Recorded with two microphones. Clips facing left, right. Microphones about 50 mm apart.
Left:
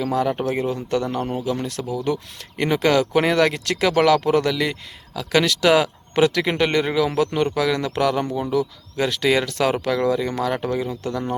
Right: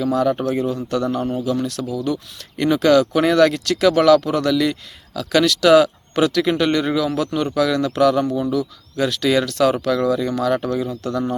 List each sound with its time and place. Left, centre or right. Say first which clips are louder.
0.0 s speech: right 3 dB; centre
1.1 s speech: right 3 dB; centre
1.6 s speech: right 1 dB; left